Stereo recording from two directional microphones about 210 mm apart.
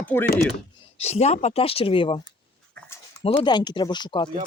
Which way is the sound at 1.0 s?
30° left (ahead or behind).